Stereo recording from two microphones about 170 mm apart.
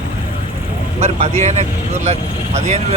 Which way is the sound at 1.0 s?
40° right (ahead or behind).